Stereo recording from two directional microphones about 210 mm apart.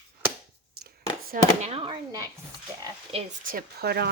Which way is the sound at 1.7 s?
25° right (ahead or behind).